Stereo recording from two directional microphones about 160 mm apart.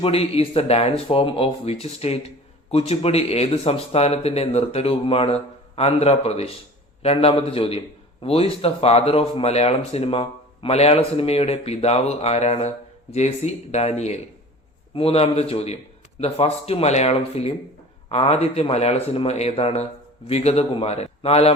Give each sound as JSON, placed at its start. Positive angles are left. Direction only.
{"t": 0.0, "sound": "speech", "side_deg": 40}